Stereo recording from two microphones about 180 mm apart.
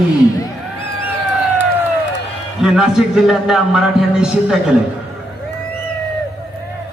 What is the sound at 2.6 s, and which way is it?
A man's voice, 5° right (ahead or behind).